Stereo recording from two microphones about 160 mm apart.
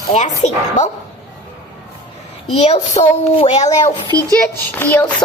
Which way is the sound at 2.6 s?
40° left (ahead or behind).